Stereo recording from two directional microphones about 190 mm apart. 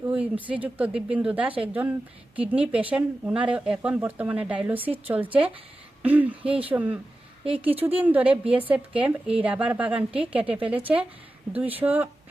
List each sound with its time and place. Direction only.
0.5 s speech: 5° right (ahead or behind)
7.4 s speech: 30° right (ahead or behind)
7.9 s speech: 10° right (ahead or behind)